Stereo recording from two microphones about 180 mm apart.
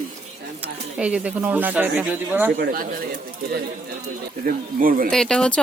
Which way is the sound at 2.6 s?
50° right (ahead or behind).